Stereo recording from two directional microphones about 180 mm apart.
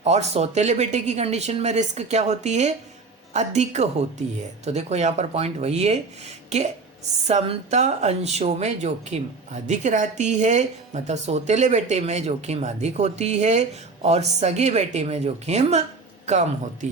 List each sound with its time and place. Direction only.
0.0 s speech: 35° right (ahead or behind)